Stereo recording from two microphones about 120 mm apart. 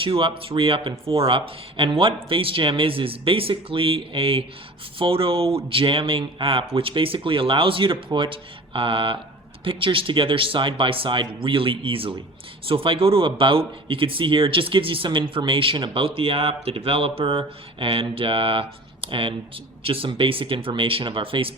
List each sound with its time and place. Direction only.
0.0 s speech: 50° right (ahead or behind)